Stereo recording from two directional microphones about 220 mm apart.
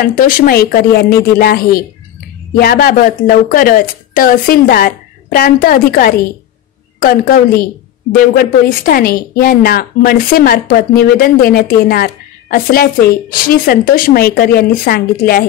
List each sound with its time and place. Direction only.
0.0 s speech: 40° left (ahead or behind)